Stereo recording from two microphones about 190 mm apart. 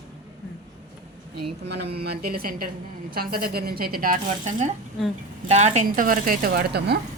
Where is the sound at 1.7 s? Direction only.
60° right (ahead or behind).